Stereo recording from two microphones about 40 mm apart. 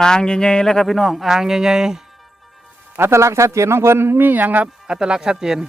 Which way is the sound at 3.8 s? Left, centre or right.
Right.